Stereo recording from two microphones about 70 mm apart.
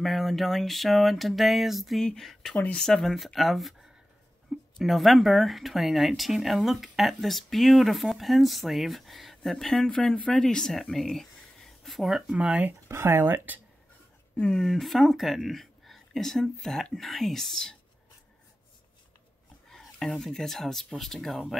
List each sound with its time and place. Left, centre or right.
0.0 s speech: centre
2.5 s speech: left
2.8 s speech: centre
4.7 s speech: centre
12.4 s speech: centre
12.8 s speech: right
14.3 s speech: centre
14.6 s speech: centre
19.7 s speech: centre